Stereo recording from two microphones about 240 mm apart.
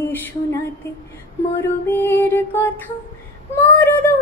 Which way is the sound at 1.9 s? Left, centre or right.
Centre.